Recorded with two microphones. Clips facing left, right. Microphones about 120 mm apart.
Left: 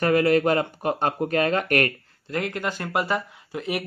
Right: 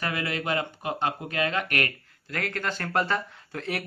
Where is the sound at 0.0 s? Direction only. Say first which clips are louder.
Left 11 dB; 45° left (ahead or behind).